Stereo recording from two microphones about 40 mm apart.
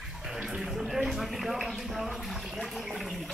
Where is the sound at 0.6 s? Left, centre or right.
Centre.